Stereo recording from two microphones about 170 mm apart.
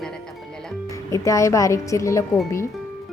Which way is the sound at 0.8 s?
20° left (ahead or behind).